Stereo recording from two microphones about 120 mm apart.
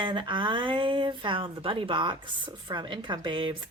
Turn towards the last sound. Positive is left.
turn(degrees=-45)  # may be behind; listen again after turning